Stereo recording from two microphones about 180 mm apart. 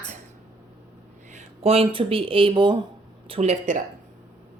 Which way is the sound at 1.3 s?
35° right (ahead or behind).